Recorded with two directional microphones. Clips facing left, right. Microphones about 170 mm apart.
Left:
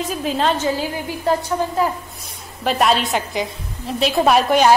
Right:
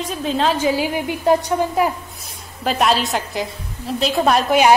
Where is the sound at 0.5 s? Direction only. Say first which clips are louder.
Right 3 dB; 15° right (ahead or behind).